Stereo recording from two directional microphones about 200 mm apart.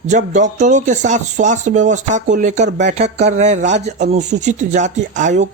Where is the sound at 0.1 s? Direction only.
35° right (ahead or behind).